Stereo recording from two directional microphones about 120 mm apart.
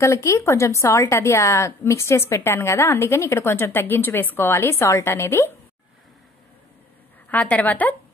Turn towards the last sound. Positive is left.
turn(degrees=15)  # may be behind; listen again after turning